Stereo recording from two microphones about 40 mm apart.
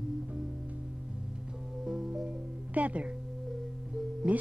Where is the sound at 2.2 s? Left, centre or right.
Right.